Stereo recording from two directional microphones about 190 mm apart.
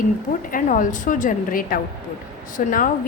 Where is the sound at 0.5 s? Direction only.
45° left (ahead or behind).